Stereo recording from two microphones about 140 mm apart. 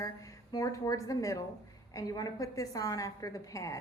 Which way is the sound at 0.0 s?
25° left (ahead or behind).